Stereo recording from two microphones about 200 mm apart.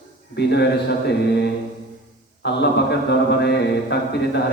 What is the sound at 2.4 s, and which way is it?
Mantra, 55° left (ahead or behind).